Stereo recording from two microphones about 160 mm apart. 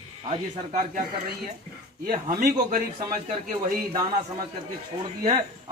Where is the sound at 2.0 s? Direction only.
70° right (ahead or behind).